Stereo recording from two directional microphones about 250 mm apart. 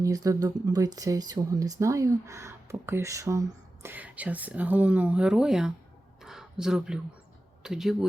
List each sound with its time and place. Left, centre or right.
0.0 s speech: centre
6.2 s a sound: centre
7.6 s speech: centre